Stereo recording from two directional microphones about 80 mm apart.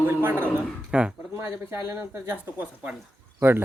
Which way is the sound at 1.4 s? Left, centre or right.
Right.